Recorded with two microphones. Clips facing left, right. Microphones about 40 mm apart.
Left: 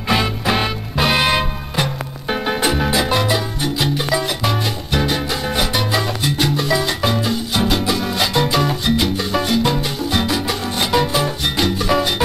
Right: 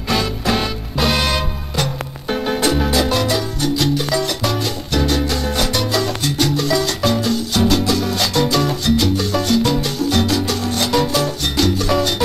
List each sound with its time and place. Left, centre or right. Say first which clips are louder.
0.1 s music: left 1 dB; left